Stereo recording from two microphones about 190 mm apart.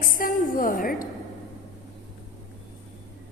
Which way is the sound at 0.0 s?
45° left (ahead or behind).